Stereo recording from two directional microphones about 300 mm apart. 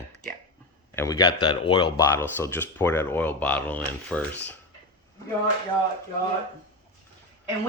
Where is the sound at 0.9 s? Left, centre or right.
Centre.